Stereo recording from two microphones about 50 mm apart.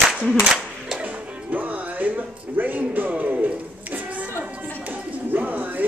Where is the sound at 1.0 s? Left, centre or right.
Right.